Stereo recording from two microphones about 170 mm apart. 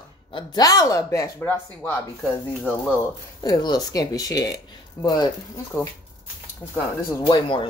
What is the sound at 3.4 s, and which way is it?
Speech, 25° left (ahead or behind).